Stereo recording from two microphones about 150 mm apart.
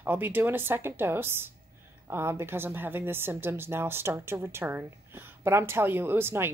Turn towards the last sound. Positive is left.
turn(degrees=-15)  # may be behind; listen again after turning